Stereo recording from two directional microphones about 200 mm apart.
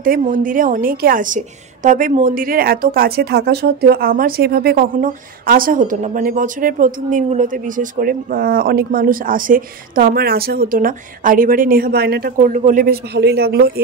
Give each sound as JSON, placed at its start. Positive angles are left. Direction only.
{"t": 0.0, "sound": "a woman's voice", "side_deg": -45}